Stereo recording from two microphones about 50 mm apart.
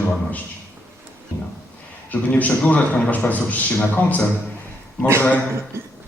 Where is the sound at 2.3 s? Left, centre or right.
Left.